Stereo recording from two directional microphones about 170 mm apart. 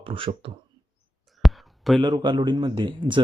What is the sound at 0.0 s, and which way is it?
Speech, 30° right (ahead or behind).